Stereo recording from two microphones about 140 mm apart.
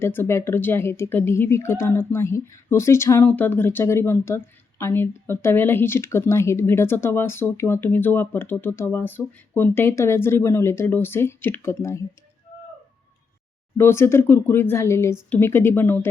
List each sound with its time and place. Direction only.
0.0 s a woman's voice: 15° left (ahead or behind)
13.7 s a woman's voice: 15° left (ahead or behind)